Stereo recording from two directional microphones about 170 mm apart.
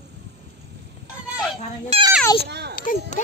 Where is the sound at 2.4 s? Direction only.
80° right.